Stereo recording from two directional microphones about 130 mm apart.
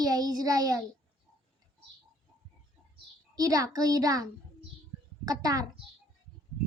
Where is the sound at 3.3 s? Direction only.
30° right (ahead or behind).